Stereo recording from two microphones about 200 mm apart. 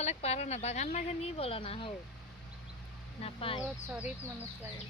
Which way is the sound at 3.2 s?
25° left (ahead or behind).